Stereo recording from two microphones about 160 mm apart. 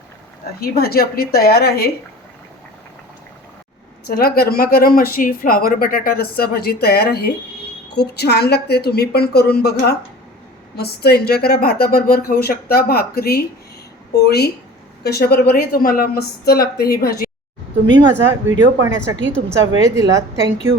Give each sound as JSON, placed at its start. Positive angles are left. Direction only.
{"t": 0.8, "sound": "speech", "side_deg": 70}
{"t": 4.1, "sound": "speech", "side_deg": 70}
{"t": 7.9, "sound": "a woman's voice", "side_deg": 90}
{"t": 14.3, "sound": "a woman's voice", "side_deg": 90}
{"t": 18.1, "sound": "a woman's voice", "side_deg": -15}